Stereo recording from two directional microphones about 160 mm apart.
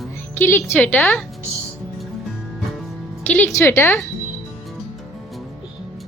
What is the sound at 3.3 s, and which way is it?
Speech, 10° left (ahead or behind).